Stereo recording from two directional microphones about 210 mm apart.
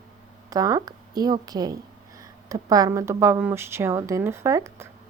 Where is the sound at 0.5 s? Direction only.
15° right (ahead or behind).